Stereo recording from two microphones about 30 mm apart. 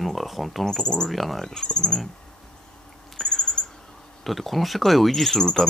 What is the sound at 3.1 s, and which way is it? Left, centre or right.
Owl, centre.